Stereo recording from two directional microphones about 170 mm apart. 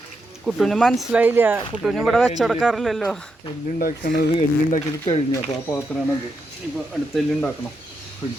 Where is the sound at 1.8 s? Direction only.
Centre (ahead or behind).